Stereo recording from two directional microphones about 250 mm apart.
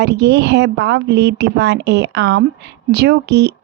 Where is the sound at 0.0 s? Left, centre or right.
Right.